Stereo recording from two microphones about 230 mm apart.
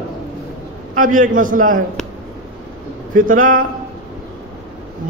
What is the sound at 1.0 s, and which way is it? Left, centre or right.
Speech, right.